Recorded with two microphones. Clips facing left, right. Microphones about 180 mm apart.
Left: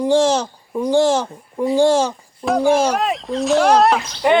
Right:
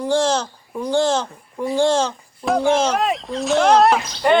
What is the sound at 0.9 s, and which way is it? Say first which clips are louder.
A child's voice: left 3 dB; 15° left (ahead or behind).